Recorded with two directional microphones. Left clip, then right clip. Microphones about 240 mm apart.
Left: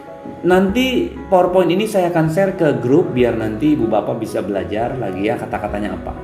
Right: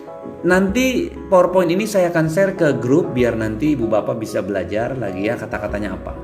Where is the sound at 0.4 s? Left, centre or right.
Right.